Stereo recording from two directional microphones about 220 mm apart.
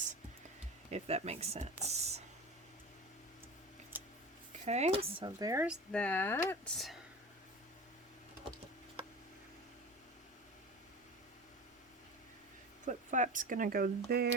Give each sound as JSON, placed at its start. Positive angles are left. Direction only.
{"t": 0.9, "sound": "speech", "side_deg": -30}
{"t": 4.6, "sound": "speech", "side_deg": -30}
{"t": 5.6, "sound": "speech", "side_deg": 5}
{"t": 12.8, "sound": "speech", "side_deg": -35}